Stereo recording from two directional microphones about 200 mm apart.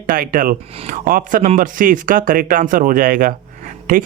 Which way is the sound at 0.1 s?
45° right (ahead or behind).